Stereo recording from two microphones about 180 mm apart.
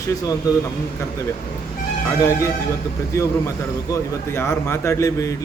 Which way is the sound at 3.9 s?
15° left (ahead or behind).